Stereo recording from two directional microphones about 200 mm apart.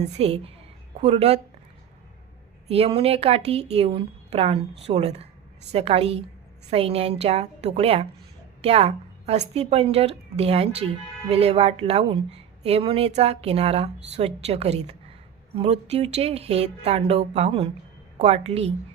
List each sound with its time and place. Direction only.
0.0 s a woman's voice: 30° right (ahead or behind)
2.6 s a woman's voice: 30° right (ahead or behind)